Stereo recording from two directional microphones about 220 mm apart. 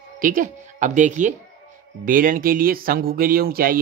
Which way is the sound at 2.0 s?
40° right (ahead or behind).